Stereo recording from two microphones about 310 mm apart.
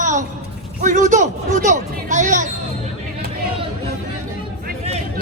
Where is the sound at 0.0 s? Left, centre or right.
Right.